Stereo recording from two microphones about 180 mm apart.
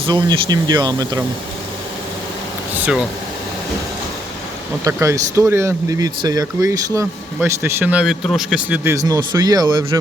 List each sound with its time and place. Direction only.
0.0 s speech: 25° right (ahead or behind)
2.7 s speech: 10° right (ahead or behind)
4.8 s speech: 15° right (ahead or behind)